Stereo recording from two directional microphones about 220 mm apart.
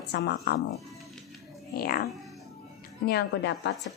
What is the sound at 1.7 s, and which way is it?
Speech, 40° left (ahead or behind).